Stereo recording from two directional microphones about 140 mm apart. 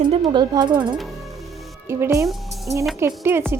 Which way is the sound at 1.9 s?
20° right (ahead or behind).